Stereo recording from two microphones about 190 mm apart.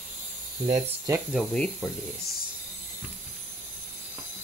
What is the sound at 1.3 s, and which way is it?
Speech, 5° left (ahead or behind).